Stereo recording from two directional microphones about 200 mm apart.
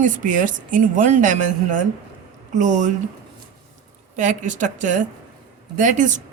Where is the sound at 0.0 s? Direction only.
40° right (ahead or behind).